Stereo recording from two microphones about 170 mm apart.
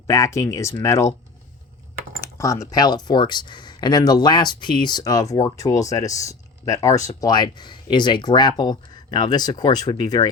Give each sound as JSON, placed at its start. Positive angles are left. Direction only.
{"t": 0.1, "sound": "speech", "side_deg": 20}
{"t": 2.2, "sound": "speech", "side_deg": 20}